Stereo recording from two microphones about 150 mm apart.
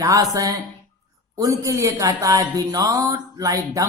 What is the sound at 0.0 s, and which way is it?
Speech, 25° right (ahead or behind).